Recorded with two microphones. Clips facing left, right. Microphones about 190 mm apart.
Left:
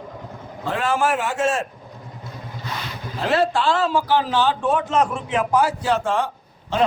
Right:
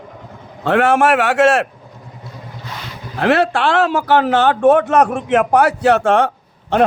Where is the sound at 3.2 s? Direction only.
70° right (ahead or behind).